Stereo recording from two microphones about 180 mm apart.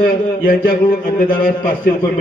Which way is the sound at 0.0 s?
50° left (ahead or behind).